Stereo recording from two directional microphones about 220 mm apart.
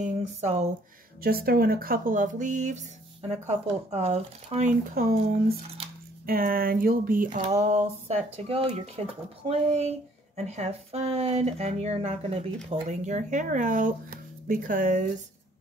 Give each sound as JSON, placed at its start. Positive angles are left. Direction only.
{"t": 0.0, "sound": "speech", "side_deg": -30}
{"t": 1.2, "sound": "speech", "side_deg": -45}